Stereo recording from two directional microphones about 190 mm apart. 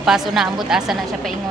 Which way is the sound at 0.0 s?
Centre (ahead or behind).